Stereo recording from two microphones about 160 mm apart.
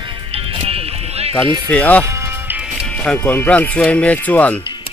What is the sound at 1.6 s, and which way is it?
Speech, 10° left (ahead or behind).